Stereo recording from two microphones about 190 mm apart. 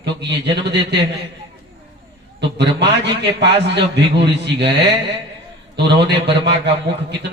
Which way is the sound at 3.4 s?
65° right (ahead or behind).